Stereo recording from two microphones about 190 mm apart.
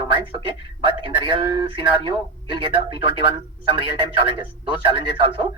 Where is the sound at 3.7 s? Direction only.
25° right (ahead or behind).